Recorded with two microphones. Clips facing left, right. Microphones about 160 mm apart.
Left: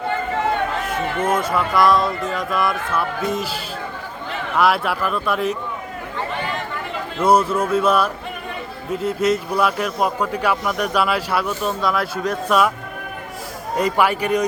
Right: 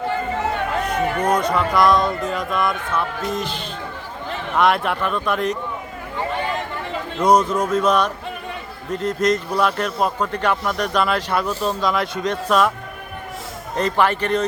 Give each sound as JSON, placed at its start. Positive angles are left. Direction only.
{"t": 1.3, "sound": "speech", "side_deg": 5}
{"t": 7.2, "sound": "a man's voice", "side_deg": 5}
{"t": 11.4, "sound": "speech", "side_deg": -35}
{"t": 11.8, "sound": "a man's voice", "side_deg": 5}
{"t": 13.7, "sound": "a man's voice", "side_deg": 10}